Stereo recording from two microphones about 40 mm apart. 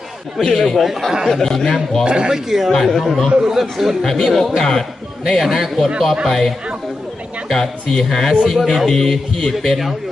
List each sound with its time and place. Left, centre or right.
0.4 s a man's voice: centre
0.8 s a man's voice: centre
1.3 s a man's voice: centre
2.0 s speech: right
2.3 s speech: centre
2.7 s a man's voice: centre
4.0 s a man's voice: centre
7.5 s a man's voice: centre